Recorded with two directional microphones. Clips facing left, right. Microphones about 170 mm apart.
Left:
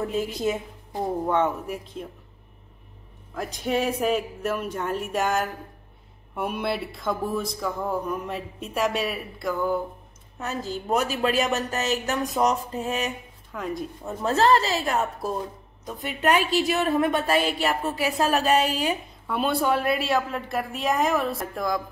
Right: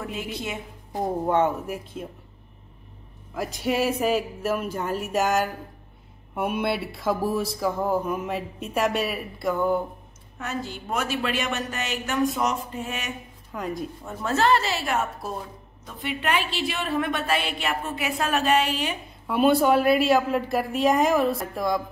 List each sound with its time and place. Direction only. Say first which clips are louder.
0.0 s a woman's voice: left 6 dB; 40° left (ahead or behind)
1.3 s speech: right 2 dB; 5° right (ahead or behind)
3.3 s speech: right 1 dB; 5° right (ahead or behind)
10.4 s a woman's voice: left 1 dB; 40° left (ahead or behind)
13.5 s a woman's voice: even; centre (ahead or behind)
14.0 s a woman's voice: left 2 dB; 35° left (ahead or behind)
19.2 s speech: right 5 dB; centre (ahead or behind)